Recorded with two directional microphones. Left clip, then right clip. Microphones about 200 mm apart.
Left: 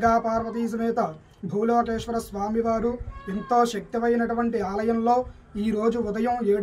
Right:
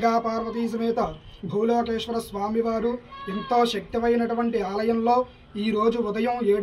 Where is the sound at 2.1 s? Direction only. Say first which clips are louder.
Even; 10° left (ahead or behind).